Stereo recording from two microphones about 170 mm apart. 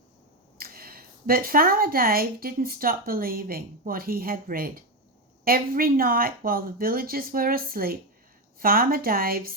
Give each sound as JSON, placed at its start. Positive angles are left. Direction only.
{"t": 0.6, "sound": "a woman's voice", "side_deg": -60}